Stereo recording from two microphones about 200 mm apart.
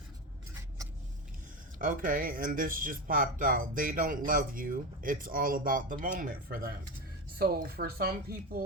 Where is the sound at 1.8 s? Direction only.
40° right (ahead or behind).